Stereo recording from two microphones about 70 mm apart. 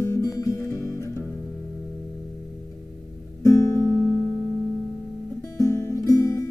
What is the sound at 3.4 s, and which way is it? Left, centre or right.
Music, left.